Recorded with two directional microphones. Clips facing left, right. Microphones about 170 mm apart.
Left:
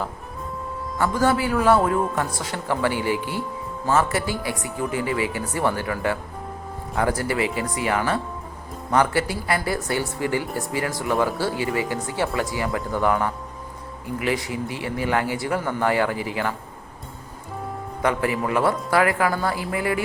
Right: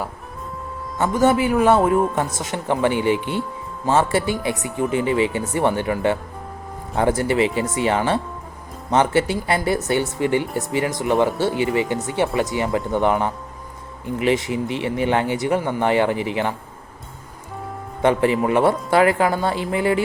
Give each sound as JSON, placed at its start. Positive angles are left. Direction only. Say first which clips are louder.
{"t": 0.9, "sound": "speech", "louder": "right 4 dB", "side_deg": -20}
{"t": 18.0, "sound": "speech", "louder": "right 6 dB", "side_deg": -25}